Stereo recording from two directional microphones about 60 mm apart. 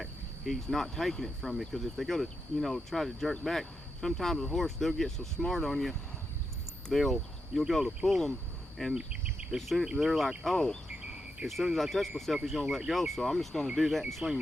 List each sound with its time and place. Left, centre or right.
0.0 s cricket: centre
6.8 s speech: centre
8.0 s cricket: centre
9.0 s insect: centre
9.6 s cricket: centre
9.8 s cricket: centre
10.8 s a sound: centre
11.4 s cricket: centre